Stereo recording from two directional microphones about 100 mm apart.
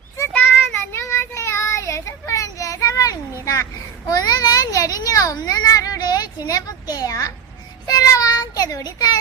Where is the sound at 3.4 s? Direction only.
30° left (ahead or behind).